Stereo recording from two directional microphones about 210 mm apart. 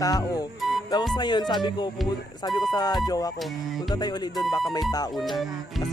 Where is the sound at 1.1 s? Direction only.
20° left (ahead or behind).